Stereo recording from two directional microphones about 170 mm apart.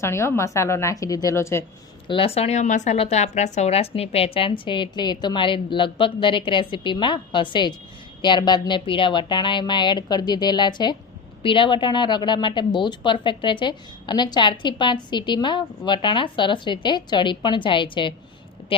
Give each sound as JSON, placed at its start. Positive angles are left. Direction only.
{"t": 0.0, "sound": "a woman's voice", "side_deg": 15}
{"t": 2.0, "sound": "a woman's voice", "side_deg": 30}